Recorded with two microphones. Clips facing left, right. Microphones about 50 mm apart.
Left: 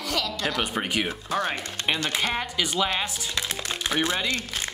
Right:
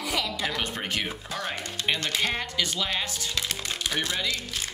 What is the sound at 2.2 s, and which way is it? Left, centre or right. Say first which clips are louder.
Speech: left 1 dB; centre.